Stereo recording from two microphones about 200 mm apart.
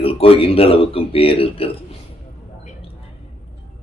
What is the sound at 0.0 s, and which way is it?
A man's voice, 30° left (ahead or behind).